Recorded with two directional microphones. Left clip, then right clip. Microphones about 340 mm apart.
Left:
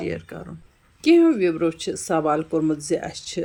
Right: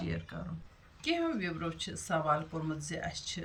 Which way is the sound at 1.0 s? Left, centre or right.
Centre.